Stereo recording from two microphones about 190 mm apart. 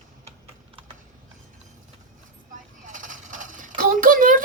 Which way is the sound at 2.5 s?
40° right (ahead or behind).